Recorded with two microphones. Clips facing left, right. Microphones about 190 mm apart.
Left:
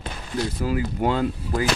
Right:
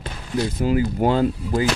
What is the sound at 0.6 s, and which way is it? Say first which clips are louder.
Speech: right 6 dB; 25° right (ahead or behind).